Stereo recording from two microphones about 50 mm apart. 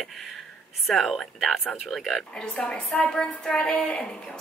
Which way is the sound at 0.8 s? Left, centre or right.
Centre.